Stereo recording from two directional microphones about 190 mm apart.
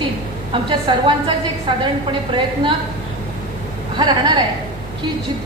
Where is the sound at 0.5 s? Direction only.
25° right (ahead or behind).